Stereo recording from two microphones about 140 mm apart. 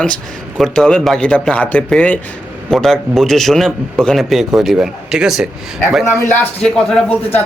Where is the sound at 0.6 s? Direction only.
5° left (ahead or behind).